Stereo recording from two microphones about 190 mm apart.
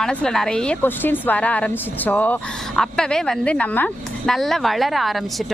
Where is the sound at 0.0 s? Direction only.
5° left (ahead or behind).